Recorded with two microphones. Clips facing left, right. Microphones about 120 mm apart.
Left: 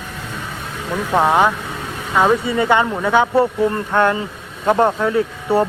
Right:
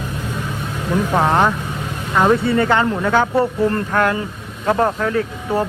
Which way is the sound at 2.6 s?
15° left (ahead or behind).